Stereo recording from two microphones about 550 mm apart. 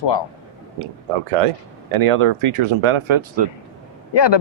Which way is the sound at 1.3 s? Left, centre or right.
Right.